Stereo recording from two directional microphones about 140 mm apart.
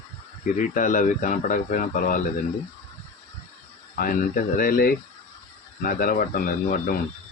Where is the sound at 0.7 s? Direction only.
65° left (ahead or behind).